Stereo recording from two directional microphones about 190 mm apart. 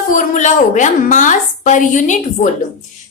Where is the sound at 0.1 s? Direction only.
40° left (ahead or behind).